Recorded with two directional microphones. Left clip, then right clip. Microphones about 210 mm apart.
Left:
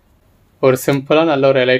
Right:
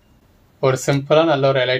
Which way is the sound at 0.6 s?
55° left (ahead or behind).